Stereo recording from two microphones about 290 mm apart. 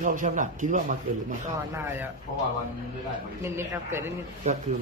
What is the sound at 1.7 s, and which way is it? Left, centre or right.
Speech, centre.